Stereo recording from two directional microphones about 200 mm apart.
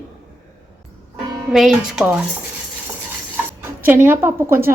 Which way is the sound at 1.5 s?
Centre (ahead or behind).